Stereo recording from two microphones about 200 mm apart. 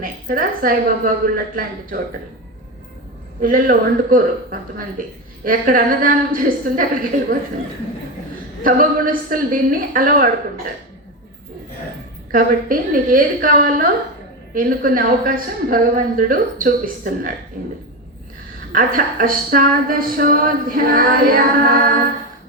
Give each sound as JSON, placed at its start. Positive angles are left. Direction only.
{"t": 0.0, "sound": "speech", "side_deg": -45}
{"t": 3.4, "sound": "speech", "side_deg": -45}
{"t": 5.5, "sound": "speech", "side_deg": -45}
{"t": 8.6, "sound": "speech", "side_deg": -45}
{"t": 12.3, "sound": "speech", "side_deg": -45}
{"t": 18.7, "sound": "speech", "side_deg": -45}